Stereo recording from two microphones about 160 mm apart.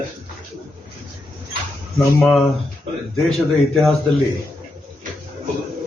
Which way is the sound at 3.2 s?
Centre (ahead or behind).